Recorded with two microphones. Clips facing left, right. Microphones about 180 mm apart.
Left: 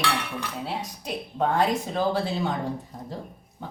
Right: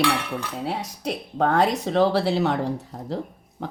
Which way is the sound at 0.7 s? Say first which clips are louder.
Right 3 dB; 75° right (ahead or behind).